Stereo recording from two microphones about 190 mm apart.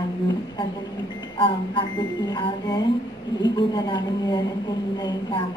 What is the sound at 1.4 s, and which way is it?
Music, 25° left (ahead or behind).